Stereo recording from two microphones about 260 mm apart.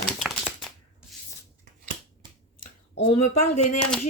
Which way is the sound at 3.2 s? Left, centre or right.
Left.